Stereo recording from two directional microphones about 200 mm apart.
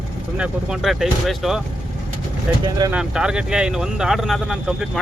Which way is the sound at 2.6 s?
20° right (ahead or behind).